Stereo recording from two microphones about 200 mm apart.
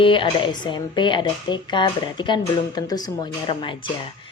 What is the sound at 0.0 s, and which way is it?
Speech, 25° left (ahead or behind).